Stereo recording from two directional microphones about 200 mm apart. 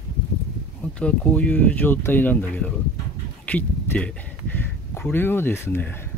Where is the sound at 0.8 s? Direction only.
5° left (ahead or behind).